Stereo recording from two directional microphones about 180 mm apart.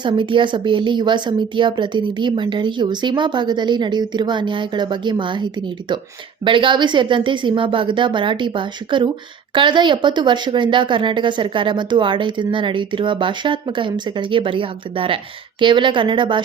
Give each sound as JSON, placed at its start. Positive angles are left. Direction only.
{"t": 0.0, "sound": "speech", "side_deg": -30}